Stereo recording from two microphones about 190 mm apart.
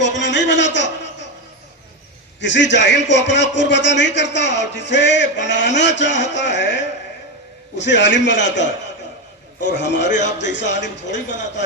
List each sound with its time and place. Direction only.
0.2 s a sound: 70° left (ahead or behind)
2.4 s a man's voice: 70° left (ahead or behind)
7.8 s a man's voice: 70° left (ahead or behind)